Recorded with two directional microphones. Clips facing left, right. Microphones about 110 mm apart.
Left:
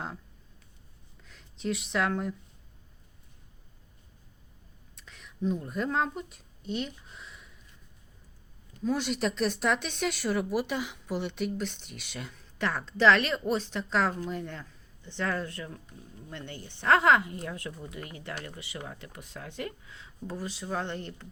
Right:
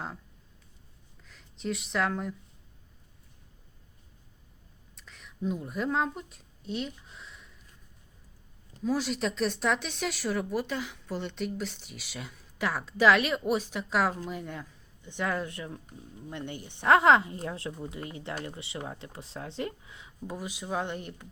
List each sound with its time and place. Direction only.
1.2 s speech: centre (ahead or behind)
4.9 s speech: centre (ahead or behind)
8.8 s speech: centre (ahead or behind)